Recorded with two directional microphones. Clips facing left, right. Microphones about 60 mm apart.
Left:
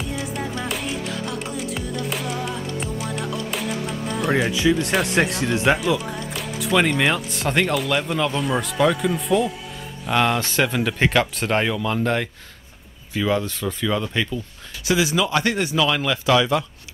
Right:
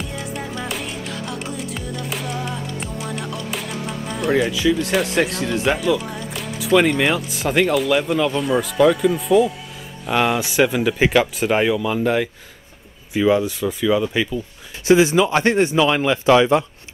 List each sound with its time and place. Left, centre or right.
0.0 s music: centre
13.1 s speech: centre
14.9 s speech: right